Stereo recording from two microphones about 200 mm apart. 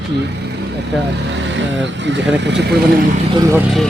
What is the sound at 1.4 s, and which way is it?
Speech, 65° right (ahead or behind).